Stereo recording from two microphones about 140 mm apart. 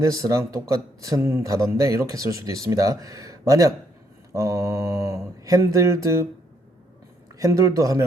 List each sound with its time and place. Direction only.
0.0 s speech: 25° right (ahead or behind)
7.3 s speech: 25° right (ahead or behind)